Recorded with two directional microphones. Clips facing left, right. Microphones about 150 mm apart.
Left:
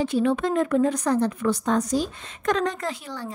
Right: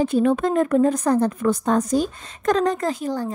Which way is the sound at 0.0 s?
45° right (ahead or behind).